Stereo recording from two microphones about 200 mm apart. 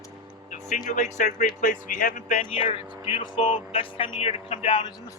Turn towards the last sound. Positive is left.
turn(degrees=25)  # may be behind; listen again after turning